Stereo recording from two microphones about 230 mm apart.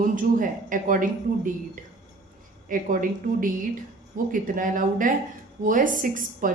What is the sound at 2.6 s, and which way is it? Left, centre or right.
Speech, right.